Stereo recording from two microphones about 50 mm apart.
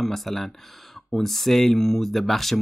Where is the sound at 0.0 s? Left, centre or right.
Centre.